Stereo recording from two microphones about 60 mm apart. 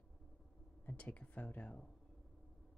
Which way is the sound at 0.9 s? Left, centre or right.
Left.